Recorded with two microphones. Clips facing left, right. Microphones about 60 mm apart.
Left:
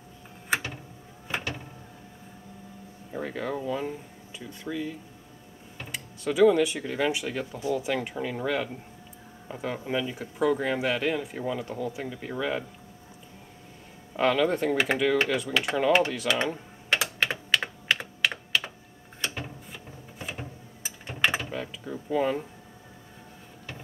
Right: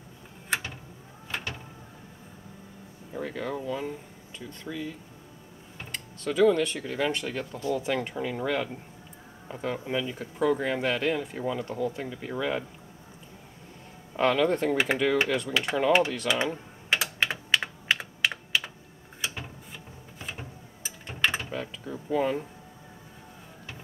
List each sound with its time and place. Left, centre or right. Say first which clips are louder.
1.3 s vehicle: left 3 dB; centre
3.1 s speech: left 1 dB; centre
14.1 s speech: even; centre
16.9 s computer keyboard: left 1 dB; centre
19.3 s mechanisms: left 2 dB; centre
21.4 s a sound: even; centre